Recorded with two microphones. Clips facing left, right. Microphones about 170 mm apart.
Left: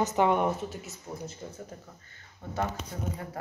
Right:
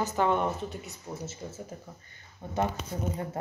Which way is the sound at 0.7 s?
Centre (ahead or behind).